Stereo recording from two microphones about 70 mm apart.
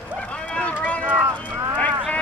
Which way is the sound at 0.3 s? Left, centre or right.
Centre.